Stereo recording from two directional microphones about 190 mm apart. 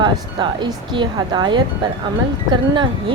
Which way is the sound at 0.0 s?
25° right (ahead or behind).